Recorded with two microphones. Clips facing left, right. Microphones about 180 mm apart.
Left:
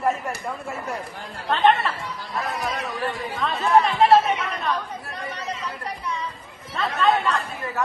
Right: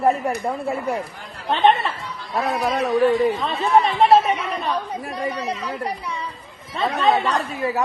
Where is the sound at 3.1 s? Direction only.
Centre (ahead or behind).